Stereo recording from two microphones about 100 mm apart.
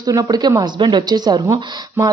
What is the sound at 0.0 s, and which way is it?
A woman's voice, 40° right (ahead or behind).